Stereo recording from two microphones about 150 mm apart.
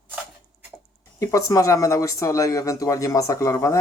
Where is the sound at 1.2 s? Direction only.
20° left (ahead or behind).